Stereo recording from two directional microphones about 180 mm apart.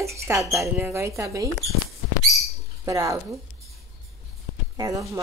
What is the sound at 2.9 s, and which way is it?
Speech, 20° right (ahead or behind).